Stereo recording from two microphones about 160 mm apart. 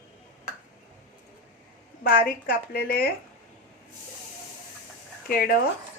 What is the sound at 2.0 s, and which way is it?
A woman's voice, 65° left (ahead or behind).